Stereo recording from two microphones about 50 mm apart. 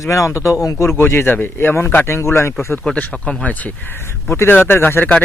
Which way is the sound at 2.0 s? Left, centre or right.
Left.